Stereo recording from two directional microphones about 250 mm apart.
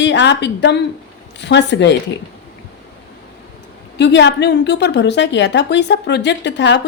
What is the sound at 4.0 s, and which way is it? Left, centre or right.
A woman's voice, left.